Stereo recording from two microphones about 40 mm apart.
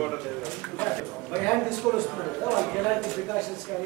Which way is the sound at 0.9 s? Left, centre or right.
Centre.